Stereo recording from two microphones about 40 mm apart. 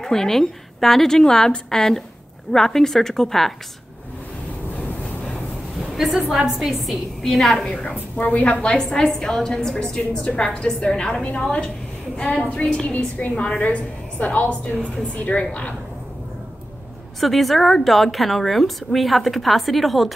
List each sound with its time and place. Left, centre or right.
0.0 s a woman's voice: centre
5.9 s a woman's voice: centre
7.9 s a woman's voice: left
8.5 s a woman's voice: centre
10.3 s a woman's voice: left
12.3 s a woman's voice: left
12.8 s a woman's voice: left
13.4 s a woman's voice: left
17.2 s a woman's voice: centre